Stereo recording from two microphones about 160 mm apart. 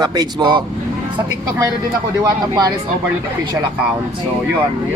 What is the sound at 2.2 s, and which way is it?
Speech, 25° right (ahead or behind).